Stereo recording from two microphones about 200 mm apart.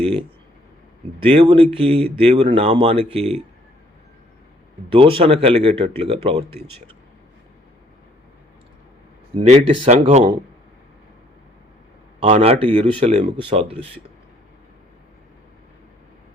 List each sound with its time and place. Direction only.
1.2 s speech: 30° right (ahead or behind)
4.9 s speech: 25° right (ahead or behind)
9.3 s speech: 30° right (ahead or behind)
12.2 s speech: 30° right (ahead or behind)